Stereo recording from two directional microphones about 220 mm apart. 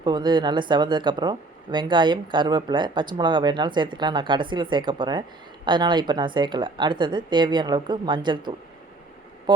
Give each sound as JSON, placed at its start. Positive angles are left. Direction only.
{"t": 0.0, "sound": "speech", "side_deg": -20}